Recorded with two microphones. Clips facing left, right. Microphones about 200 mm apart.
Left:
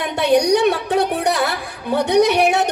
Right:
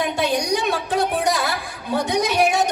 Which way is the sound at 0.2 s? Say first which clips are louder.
Left 11 dB; 65° left (ahead or behind).